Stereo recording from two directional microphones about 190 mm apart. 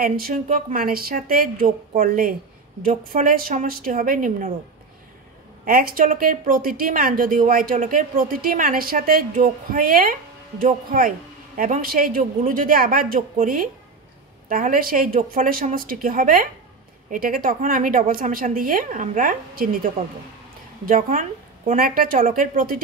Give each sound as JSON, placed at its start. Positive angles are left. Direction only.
{"t": 0.0, "sound": "a woman's voice", "side_deg": -50}
{"t": 5.7, "sound": "a woman's voice", "side_deg": -50}